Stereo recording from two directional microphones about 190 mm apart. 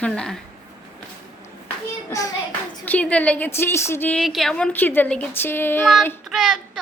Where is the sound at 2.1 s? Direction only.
20° left (ahead or behind).